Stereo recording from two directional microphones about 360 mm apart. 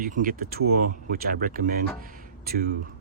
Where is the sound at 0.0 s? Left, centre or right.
Right.